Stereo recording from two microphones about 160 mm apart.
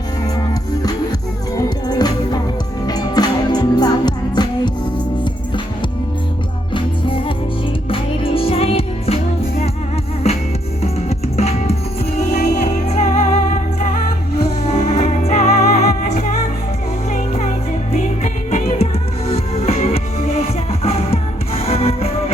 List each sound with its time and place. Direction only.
0.3 s music: 25° left (ahead or behind)
6.7 s music: 30° left (ahead or behind)
11.3 s music: 40° left (ahead or behind)